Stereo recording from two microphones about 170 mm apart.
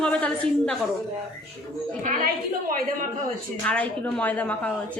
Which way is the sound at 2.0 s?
50° right (ahead or behind).